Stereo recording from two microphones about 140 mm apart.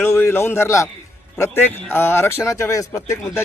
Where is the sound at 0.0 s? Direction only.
15° left (ahead or behind).